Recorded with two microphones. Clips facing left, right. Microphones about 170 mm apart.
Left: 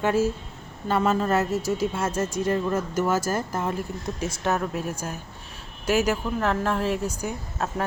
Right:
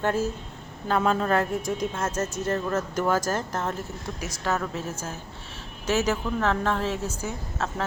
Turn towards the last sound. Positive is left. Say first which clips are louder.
# left 1 dB
turn(degrees=15)  # may be behind; listen again after turning